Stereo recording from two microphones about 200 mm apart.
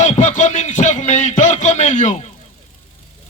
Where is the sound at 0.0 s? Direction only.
35° left (ahead or behind).